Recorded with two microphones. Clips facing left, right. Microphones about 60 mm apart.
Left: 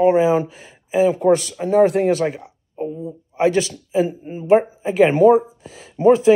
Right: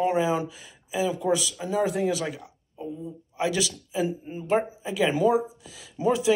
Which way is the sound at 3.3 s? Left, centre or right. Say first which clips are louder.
Left 9 dB; left.